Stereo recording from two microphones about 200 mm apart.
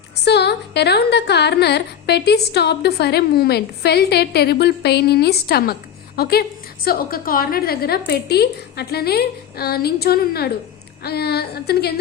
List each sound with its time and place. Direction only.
0.3 s a woman's voice: 55° left (ahead or behind)